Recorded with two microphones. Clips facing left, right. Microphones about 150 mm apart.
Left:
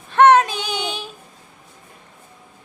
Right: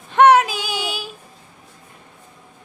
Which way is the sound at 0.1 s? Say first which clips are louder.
Even; 15° right (ahead or behind).